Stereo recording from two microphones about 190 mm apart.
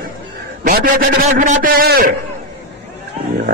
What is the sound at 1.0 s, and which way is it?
A man's voice, 45° right (ahead or behind).